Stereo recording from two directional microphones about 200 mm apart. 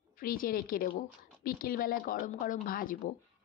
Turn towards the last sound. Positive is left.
turn(degrees=45)  # may be behind; listen again after turning